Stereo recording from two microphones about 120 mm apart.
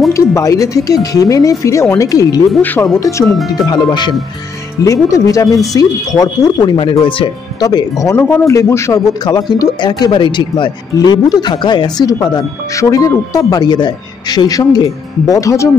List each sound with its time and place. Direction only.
0.1 s speech: 25° left (ahead or behind)
2.6 s speech: 15° left (ahead or behind)
3.5 s speech: 35° left (ahead or behind)
4.8 s speech: 25° left (ahead or behind); by 7.2 s 45° left (ahead or behind)
7.6 s speech: 30° left (ahead or behind)